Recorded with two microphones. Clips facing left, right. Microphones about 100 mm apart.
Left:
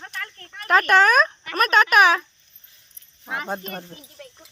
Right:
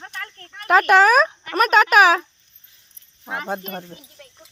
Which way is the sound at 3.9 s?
5° right (ahead or behind).